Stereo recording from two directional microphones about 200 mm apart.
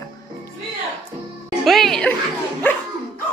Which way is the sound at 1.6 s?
Centre (ahead or behind).